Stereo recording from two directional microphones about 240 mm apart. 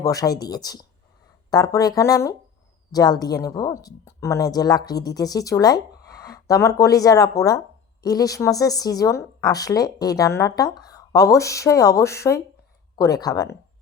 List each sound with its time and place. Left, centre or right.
0.0 s a woman's voice: centre